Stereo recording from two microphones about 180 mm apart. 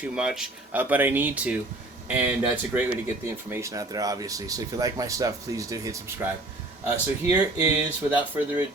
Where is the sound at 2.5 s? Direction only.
10° right (ahead or behind).